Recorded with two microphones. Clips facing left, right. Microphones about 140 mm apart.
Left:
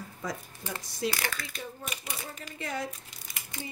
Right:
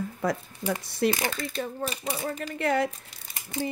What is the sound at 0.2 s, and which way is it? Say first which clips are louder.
Speech: right 8 dB; 60° right (ahead or behind).